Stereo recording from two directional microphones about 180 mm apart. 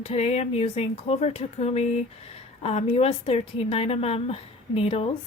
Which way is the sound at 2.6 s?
35° left (ahead or behind).